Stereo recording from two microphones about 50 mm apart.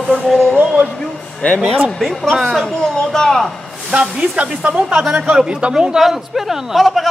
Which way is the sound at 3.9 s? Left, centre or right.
Centre.